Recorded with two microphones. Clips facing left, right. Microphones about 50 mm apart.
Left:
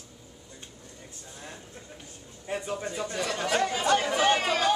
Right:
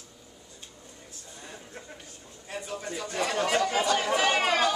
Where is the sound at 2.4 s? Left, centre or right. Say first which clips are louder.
Left 4 dB; centre.